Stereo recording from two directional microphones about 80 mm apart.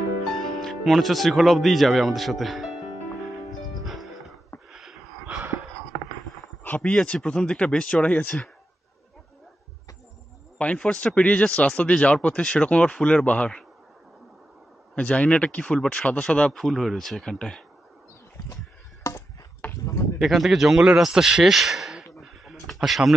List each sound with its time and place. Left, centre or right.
0.3 s speech: centre
3.8 s music: centre
4.6 s a sound: centre
6.8 s speech: centre
10.6 s speech: centre
15.0 s speech: centre
19.6 s a sound: left
20.2 s speech: centre